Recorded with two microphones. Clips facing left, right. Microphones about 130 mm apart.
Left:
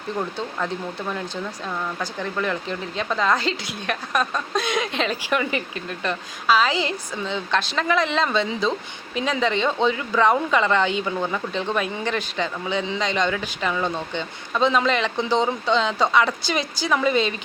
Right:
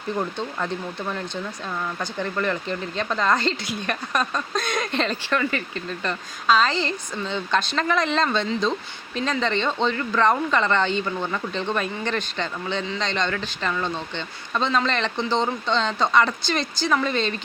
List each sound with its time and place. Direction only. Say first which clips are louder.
0.2 s speech: left 2 dB; centre (ahead or behind)
2.0 s speech: even; centre (ahead or behind)
5.3 s speech: left 1 dB; 15° left (ahead or behind)
5.7 s speech: left 1 dB; 5° left (ahead or behind)